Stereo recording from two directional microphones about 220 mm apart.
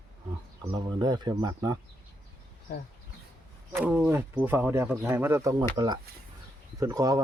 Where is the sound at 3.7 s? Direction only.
5° right (ahead or behind).